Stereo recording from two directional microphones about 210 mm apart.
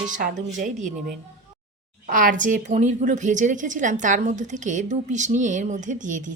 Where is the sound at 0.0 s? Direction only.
40° right (ahead or behind).